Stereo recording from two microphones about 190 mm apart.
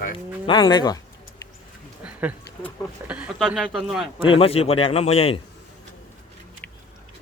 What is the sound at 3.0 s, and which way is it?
Speech, 5° right (ahead or behind).